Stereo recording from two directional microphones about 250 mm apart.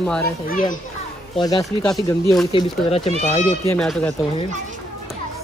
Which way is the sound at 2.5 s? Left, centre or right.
Left.